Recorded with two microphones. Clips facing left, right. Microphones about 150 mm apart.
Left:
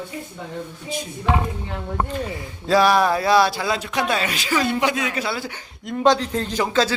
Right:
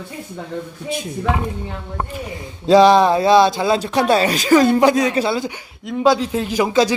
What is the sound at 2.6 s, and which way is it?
Speech, 20° right (ahead or behind).